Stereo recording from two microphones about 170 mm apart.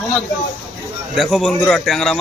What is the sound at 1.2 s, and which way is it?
A man's voice, centre (ahead or behind).